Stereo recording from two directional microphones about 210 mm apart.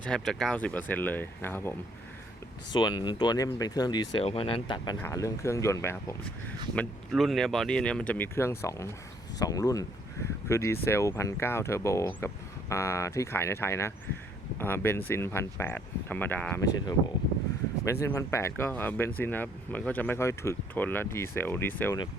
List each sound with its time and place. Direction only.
0.0 s speech: 5° left (ahead or behind)
2.7 s speech: 20° left (ahead or behind)
6.7 s speech: centre (ahead or behind)
18.0 s speech: 15° left (ahead or behind)